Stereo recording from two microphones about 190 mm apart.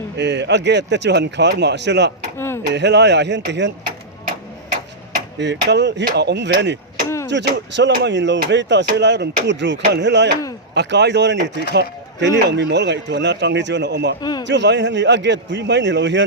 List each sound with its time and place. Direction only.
0.2 s a man's voice: 65° right (ahead or behind)
5.4 s a man's voice: 65° right (ahead or behind)
14.2 s a man's voice: 20° left (ahead or behind)
14.4 s speech: 65° right (ahead or behind)